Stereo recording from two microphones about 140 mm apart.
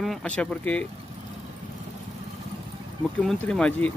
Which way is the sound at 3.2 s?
10° left (ahead or behind).